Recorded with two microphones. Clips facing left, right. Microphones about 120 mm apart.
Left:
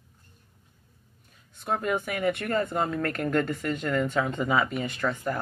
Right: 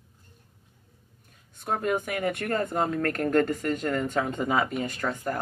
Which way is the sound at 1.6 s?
45° right (ahead or behind).